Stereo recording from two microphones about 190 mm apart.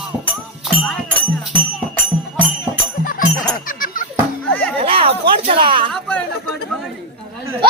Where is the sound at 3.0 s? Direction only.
45° left (ahead or behind).